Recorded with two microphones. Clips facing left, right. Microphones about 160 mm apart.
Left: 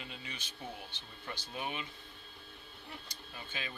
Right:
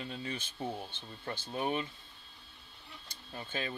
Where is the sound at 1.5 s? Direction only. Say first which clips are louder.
Right 7 dB; 40° right (ahead or behind).